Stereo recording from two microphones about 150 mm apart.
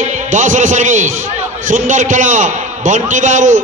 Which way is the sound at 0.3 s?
55° right (ahead or behind).